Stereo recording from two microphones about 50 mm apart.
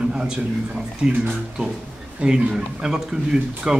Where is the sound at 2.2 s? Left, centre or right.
Centre.